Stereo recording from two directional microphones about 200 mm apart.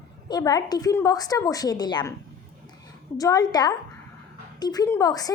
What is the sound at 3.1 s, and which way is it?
A woman's voice, 20° left (ahead or behind).